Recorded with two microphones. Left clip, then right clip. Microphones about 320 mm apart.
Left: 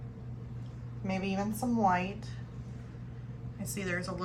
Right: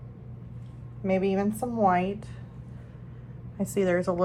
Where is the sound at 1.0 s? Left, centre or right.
Right.